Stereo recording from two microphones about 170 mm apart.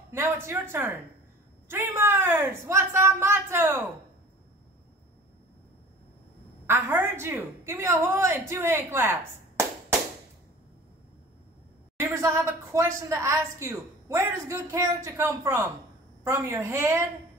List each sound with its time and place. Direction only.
0.1 s a woman's voice: 15° right (ahead or behind)
6.6 s a woman's voice: 15° right (ahead or behind)
12.0 s a woman's voice: 15° right (ahead or behind)